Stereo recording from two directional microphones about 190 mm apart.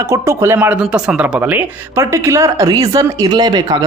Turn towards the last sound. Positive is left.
turn(degrees=-20)  # may be behind; listen again after turning